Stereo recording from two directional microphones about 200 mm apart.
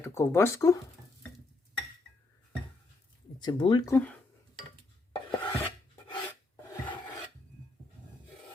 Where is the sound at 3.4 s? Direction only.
20° left (ahead or behind).